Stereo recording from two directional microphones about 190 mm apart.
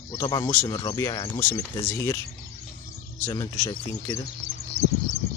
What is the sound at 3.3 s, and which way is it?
Speech, 15° left (ahead or behind).